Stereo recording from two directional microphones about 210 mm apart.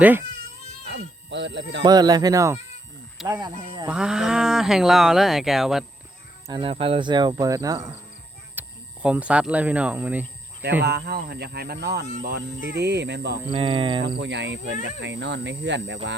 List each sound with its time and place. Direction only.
0.0 s speech: 10° right (ahead or behind)
0.9 s speech: 55° right (ahead or behind)
1.8 s speech: 20° right (ahead or behind)
3.8 s speech: 5° right (ahead or behind)
6.5 s speech: 25° right (ahead or behind)
8.5 s speech: 5° right (ahead or behind)
10.6 s speech: 55° right (ahead or behind)
13.5 s speech: 25° right (ahead or behind)
14.2 s speech: 55° right (ahead or behind)